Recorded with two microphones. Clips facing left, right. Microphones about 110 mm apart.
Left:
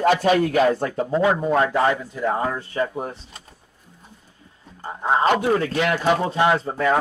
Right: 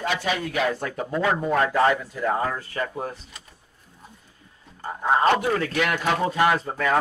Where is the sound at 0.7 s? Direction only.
30° left (ahead or behind).